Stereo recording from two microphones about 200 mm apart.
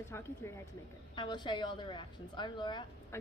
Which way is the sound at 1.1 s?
20° left (ahead or behind).